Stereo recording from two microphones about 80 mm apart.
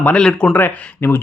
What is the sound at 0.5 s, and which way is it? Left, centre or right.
Speech, left.